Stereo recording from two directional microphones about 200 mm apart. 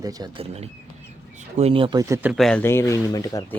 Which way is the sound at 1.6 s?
30° right (ahead or behind).